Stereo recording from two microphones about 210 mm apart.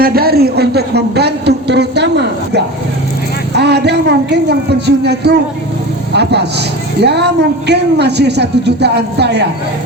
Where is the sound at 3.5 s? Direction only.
50° right (ahead or behind).